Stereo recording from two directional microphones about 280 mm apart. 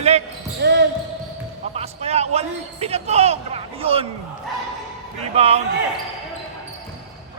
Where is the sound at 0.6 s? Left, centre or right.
Right.